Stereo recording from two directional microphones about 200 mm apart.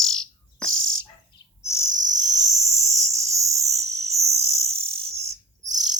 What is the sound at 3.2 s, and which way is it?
Cricket, 35° right (ahead or behind).